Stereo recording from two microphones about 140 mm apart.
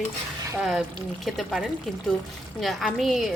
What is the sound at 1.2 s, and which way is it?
A woman's voice, centre (ahead or behind).